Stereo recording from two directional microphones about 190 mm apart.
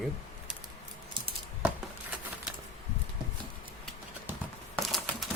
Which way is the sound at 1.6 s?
5° right (ahead or behind).